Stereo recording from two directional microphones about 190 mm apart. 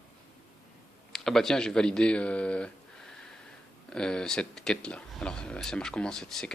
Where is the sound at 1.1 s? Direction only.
Centre (ahead or behind).